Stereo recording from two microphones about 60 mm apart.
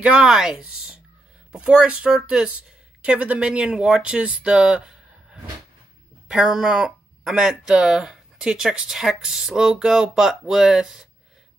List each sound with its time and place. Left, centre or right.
0.0 s speech: centre